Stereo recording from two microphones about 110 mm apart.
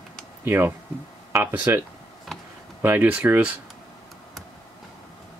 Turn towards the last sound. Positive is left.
turn(degrees=-10)  # may be behind; listen again after turning